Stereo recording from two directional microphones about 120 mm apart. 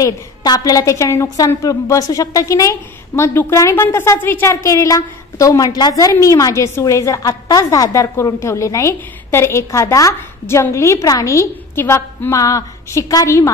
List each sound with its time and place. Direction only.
0.0 s a woman's voice: 30° left (ahead or behind)